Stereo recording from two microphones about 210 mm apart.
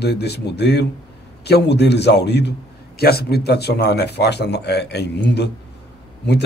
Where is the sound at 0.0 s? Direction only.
50° left (ahead or behind).